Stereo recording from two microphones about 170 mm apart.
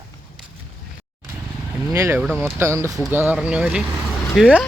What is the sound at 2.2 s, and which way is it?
Speech, 5° right (ahead or behind).